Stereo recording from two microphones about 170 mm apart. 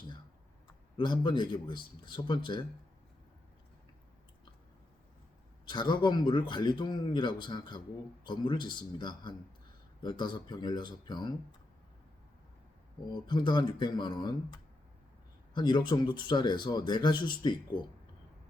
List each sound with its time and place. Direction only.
0.9 s speech: 25° left (ahead or behind)
5.6 s speech: 25° left (ahead or behind)
13.1 s speech: 25° left (ahead or behind)